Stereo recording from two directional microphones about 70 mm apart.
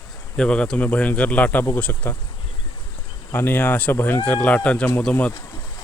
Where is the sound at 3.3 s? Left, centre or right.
Left.